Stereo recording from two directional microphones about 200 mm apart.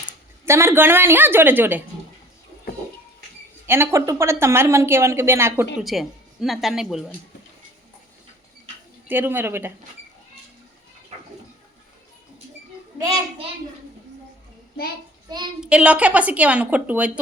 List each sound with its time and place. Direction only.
0.4 s a woman's voice: 15° right (ahead or behind)
3.7 s a woman's voice: 15° right (ahead or behind)
5.8 s speech: centre (ahead or behind)
9.0 s a woman's voice: 10° right (ahead or behind)
13.0 s a child's voice: 20° right (ahead or behind)
15.6 s a woman's voice: 5° right (ahead or behind)